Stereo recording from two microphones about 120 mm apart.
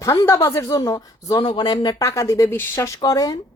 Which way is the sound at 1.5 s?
40° left (ahead or behind).